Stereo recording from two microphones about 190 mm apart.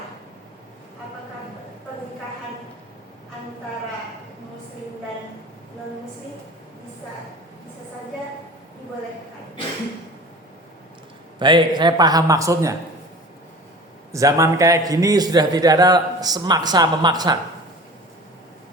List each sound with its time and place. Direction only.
11.3 s a man's voice: 25° right (ahead or behind)
14.1 s a man's voice: 15° right (ahead or behind)